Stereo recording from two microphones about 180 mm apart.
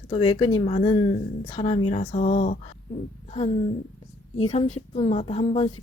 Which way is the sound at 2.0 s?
40° left (ahead or behind).